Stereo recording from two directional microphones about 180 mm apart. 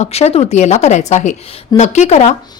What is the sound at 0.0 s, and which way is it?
A woman's voice, 35° left (ahead or behind).